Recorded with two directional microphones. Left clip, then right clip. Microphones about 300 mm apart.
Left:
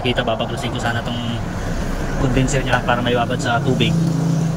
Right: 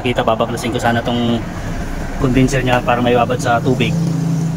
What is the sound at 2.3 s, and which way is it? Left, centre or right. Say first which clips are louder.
Speech: right 5 dB; centre.